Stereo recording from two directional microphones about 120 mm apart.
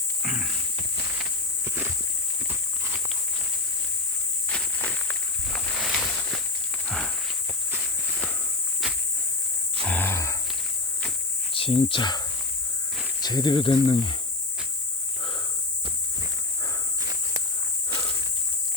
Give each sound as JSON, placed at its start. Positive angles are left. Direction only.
{"t": 0.2, "sound": "wild animals", "side_deg": -10}
{"t": 2.5, "sound": "walk", "side_deg": -20}
{"t": 4.4, "sound": "walk", "side_deg": 10}
{"t": 5.5, "sound": "a sound", "side_deg": 0}
{"t": 6.8, "sound": "walk", "side_deg": 5}
{"t": 7.7, "sound": "walk", "side_deg": -15}
{"t": 8.8, "sound": "a sound", "side_deg": 0}
{"t": 9.8, "sound": "cricket", "side_deg": 15}
{"t": 11.5, "sound": "speech", "side_deg": 50}
{"t": 13.2, "sound": "speech", "side_deg": 35}
{"t": 17.0, "sound": "walk", "side_deg": -30}